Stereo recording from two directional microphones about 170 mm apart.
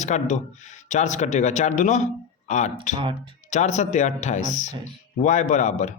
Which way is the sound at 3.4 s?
45° left (ahead or behind).